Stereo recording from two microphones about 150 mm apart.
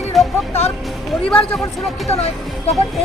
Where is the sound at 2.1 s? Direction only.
45° left (ahead or behind).